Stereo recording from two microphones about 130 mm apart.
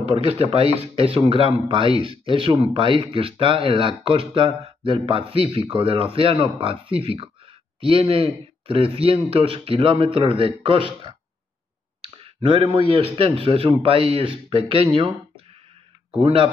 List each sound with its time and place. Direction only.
0.0 s speech: 50° right (ahead or behind)